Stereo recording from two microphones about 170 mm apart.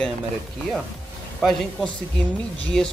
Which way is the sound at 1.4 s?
5° left (ahead or behind).